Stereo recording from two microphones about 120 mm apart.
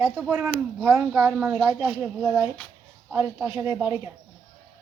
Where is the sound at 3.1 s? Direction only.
20° right (ahead or behind).